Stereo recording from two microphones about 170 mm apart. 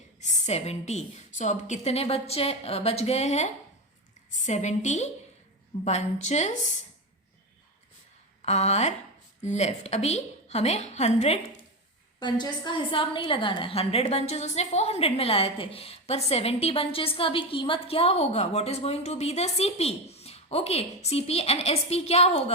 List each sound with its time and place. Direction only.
0.2 s a woman's voice: 45° left (ahead or behind)
8.4 s a woman's voice: 40° left (ahead or behind)
12.2 s a woman's voice: 25° left (ahead or behind)